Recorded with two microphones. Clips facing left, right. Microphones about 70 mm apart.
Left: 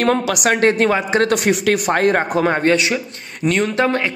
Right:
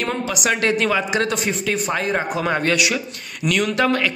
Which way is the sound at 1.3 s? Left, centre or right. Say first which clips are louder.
Left 6 dB; left.